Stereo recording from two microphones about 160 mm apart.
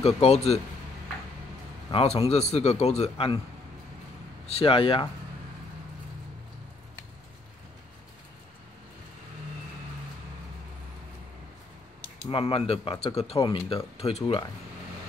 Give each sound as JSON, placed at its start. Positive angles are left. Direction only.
{"t": 0.0, "sound": "a man's voice", "side_deg": 40}
{"t": 1.9, "sound": "a man's voice", "side_deg": 35}
{"t": 4.5, "sound": "a man's voice", "side_deg": 35}
{"t": 12.3, "sound": "a man's voice", "side_deg": 35}